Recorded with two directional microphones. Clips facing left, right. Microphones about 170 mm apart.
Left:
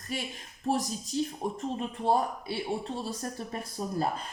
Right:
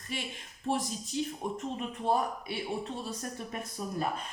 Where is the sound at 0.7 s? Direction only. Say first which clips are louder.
Left 3 dB; 40° left (ahead or behind).